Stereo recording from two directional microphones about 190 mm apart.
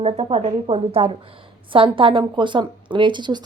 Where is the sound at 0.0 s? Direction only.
30° right (ahead or behind).